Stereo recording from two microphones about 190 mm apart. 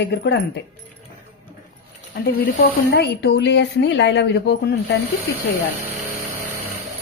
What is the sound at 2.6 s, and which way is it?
A woman's voice, 60° left (ahead or behind).